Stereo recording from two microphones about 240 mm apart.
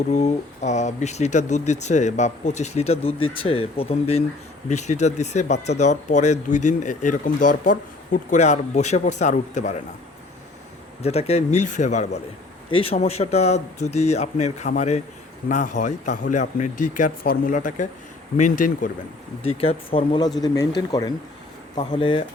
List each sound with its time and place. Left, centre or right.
0.1 s speech: left
11.0 s speech: left